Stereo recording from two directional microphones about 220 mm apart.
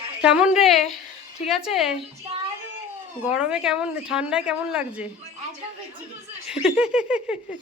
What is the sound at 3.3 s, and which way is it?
A woman's voice, 5° right (ahead or behind).